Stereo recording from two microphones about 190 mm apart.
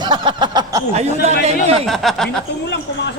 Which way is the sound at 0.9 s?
35° right (ahead or behind).